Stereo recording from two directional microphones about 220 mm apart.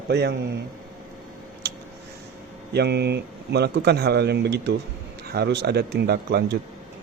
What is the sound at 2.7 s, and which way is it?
Speech, 50° right (ahead or behind).